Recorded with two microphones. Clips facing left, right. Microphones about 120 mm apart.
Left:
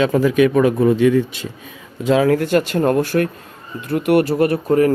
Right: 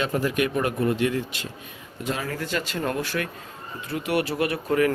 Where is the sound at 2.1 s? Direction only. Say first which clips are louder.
Left 15 dB; 80° left; by 4.9 s 35° left (ahead or behind).